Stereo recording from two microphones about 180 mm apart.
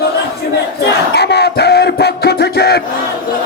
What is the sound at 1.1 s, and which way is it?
Music, 70° left (ahead or behind).